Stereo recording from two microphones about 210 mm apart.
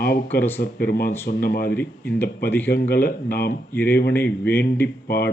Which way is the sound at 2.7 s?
50° left (ahead or behind).